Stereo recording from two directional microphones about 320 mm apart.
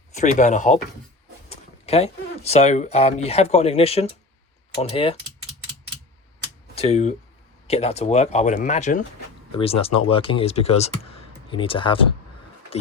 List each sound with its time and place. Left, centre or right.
0.1 s speech: left
6.7 s speech: centre